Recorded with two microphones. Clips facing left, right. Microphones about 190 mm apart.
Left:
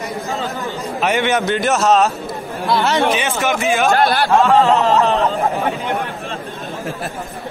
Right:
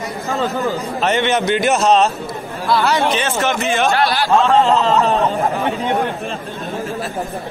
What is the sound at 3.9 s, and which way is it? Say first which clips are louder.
Speech: left 2 dB; 55° left (ahead or behind).